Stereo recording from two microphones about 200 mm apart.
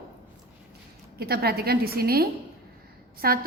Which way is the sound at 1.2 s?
50° right (ahead or behind).